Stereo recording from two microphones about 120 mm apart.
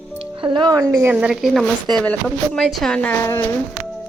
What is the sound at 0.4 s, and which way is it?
Speech, 45° right (ahead or behind).